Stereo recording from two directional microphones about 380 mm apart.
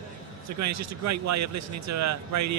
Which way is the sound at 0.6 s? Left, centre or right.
Right.